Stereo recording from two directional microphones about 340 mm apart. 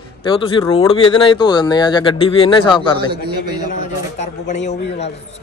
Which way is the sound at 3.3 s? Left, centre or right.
Centre.